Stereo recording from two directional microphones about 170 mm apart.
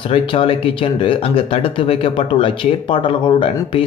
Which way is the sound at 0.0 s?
30° left (ahead or behind).